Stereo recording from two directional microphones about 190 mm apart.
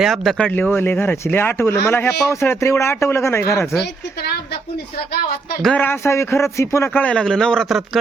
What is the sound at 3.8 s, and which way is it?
A woman's voice, 60° left (ahead or behind).